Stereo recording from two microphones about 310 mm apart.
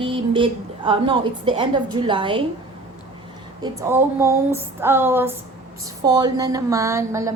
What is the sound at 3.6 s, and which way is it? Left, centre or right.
A woman's voice, centre.